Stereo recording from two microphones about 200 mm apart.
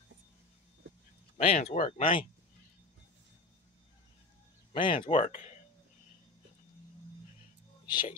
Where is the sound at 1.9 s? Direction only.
30° left (ahead or behind).